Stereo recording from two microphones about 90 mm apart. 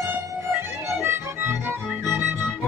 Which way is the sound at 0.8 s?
25° right (ahead or behind).